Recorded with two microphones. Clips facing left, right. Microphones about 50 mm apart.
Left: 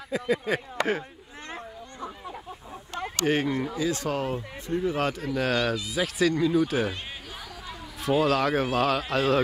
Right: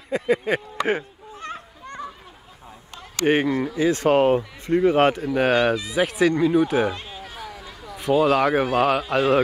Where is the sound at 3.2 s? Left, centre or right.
Right.